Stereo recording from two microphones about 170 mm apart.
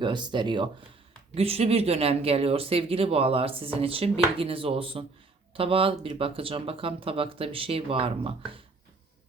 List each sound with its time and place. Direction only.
0.0 s speech: 25° right (ahead or behind)